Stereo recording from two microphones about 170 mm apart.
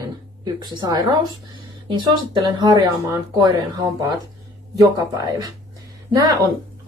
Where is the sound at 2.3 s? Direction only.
25° right (ahead or behind).